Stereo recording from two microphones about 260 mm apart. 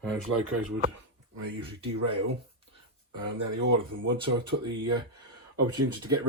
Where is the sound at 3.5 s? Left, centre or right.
Right.